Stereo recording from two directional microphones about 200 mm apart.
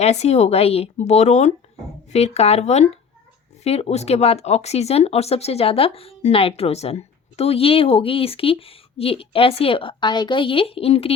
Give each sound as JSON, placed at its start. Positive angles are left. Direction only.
{"t": 0.0, "sound": "speech", "side_deg": 35}